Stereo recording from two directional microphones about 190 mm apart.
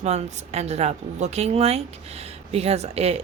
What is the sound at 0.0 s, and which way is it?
A woman's voice, 35° right (ahead or behind).